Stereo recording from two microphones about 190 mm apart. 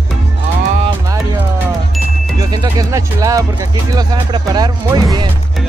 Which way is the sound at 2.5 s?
20° right (ahead or behind).